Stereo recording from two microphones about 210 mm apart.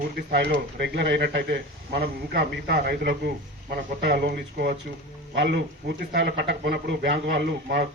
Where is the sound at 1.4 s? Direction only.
45° right (ahead or behind).